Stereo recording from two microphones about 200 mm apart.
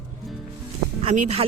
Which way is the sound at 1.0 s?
35° right (ahead or behind).